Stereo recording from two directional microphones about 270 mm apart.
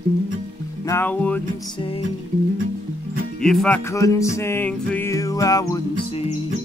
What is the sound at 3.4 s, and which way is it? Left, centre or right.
Music, centre.